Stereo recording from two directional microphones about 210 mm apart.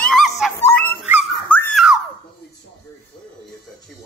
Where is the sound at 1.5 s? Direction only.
5° left (ahead or behind).